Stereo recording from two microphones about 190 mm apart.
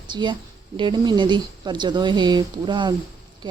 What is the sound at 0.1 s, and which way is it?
Speech, 25° right (ahead or behind).